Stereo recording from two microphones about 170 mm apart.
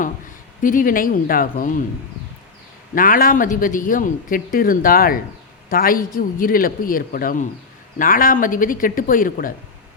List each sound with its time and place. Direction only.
0.6 s speech: 55° left (ahead or behind)
2.9 s a woman's voice: 55° left (ahead or behind)